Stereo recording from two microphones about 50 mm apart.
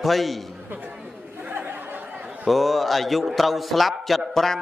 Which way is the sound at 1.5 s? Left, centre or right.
Right.